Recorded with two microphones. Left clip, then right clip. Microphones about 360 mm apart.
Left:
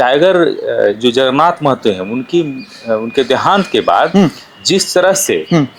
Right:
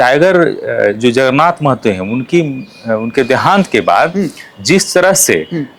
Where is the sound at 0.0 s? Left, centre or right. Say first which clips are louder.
Right 1 dB; right.